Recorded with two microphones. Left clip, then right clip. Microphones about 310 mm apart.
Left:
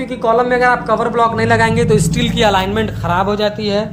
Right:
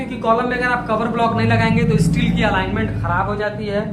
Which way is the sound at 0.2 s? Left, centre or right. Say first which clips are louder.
Left 5 dB; centre.